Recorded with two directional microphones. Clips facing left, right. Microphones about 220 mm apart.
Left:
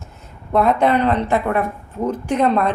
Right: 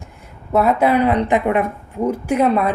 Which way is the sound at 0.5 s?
5° right (ahead or behind).